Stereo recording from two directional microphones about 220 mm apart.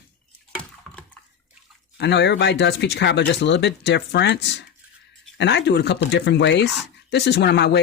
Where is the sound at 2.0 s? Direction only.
50° left (ahead or behind).